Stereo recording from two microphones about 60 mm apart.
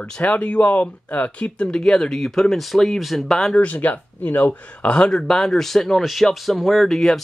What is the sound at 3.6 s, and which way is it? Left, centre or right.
Speech, left.